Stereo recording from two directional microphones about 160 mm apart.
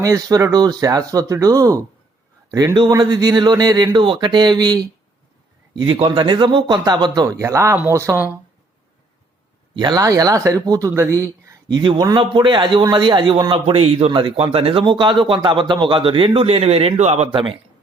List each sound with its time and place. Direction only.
0.0 s speech: 20° right (ahead or behind)
9.7 s a man's voice: 25° right (ahead or behind)